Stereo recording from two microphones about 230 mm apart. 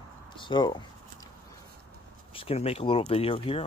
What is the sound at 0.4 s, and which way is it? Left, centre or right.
Speech, centre.